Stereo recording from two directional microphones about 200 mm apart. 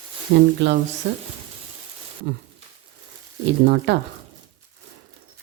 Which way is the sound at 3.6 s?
55° right (ahead or behind).